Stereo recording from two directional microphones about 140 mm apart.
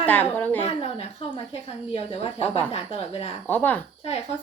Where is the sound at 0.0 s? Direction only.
15° left (ahead or behind).